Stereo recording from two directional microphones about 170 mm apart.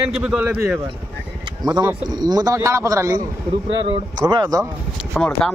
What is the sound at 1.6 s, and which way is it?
Speech, 20° right (ahead or behind).